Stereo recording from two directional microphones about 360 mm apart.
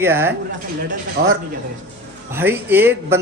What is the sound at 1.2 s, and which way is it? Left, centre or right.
Speech, right.